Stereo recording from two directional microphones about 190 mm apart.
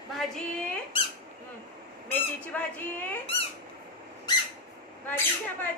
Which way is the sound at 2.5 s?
10° left (ahead or behind).